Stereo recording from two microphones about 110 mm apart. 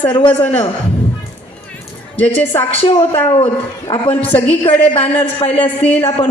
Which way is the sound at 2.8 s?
60° left (ahead or behind).